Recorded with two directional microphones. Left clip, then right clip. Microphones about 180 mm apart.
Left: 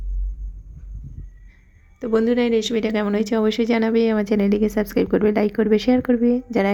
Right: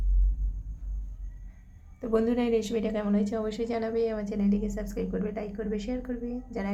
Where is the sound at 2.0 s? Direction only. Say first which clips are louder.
Left 8 dB; 15° left (ahead or behind); by 6.7 s 35° left (ahead or behind).